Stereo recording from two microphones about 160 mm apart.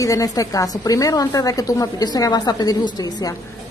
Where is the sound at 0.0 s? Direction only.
20° left (ahead or behind).